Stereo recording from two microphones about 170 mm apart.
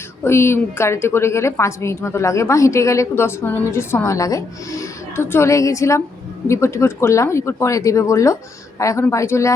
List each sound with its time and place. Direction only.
0.3 s a woman's voice: 15° left (ahead or behind)